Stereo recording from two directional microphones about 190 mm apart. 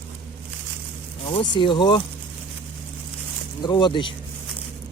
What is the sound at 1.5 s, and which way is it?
Speech, 25° left (ahead or behind).